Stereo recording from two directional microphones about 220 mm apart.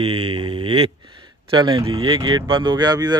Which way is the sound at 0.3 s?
20° right (ahead or behind).